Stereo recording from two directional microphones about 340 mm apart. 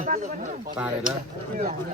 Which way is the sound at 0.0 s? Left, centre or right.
Right.